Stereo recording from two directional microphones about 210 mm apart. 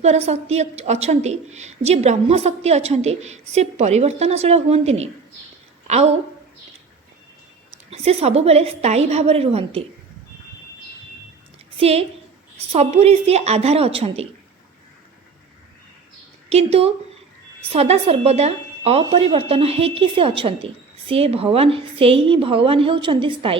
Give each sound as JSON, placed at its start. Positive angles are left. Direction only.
{"t": 0.0, "sound": "a woman's voice", "side_deg": -30}
{"t": 7.9, "sound": "a woman's voice", "side_deg": -30}
{"t": 11.8, "sound": "a woman's voice", "side_deg": -30}
{"t": 16.5, "sound": "a woman's voice", "side_deg": -30}